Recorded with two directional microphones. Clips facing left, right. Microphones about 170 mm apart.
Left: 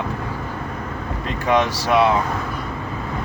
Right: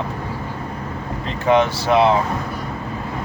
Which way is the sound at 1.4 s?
30° right (ahead or behind).